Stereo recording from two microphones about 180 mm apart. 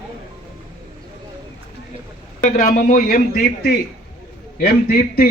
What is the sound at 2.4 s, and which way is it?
Speech, 50° left (ahead or behind).